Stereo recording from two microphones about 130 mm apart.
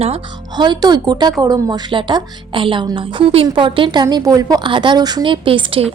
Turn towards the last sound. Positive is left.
turn(degrees=-45)  # may be behind; listen again after turning